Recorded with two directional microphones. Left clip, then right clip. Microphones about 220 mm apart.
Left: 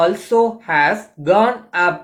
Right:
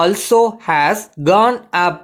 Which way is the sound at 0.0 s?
50° right (ahead or behind).